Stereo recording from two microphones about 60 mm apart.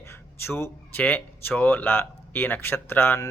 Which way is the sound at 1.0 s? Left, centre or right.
Left.